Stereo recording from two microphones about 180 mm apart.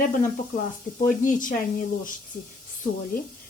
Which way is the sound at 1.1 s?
45° left (ahead or behind).